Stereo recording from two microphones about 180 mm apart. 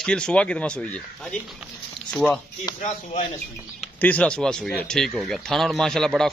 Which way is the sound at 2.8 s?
45° left (ahead or behind).